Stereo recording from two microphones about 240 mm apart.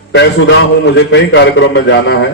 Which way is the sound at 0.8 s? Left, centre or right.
Left.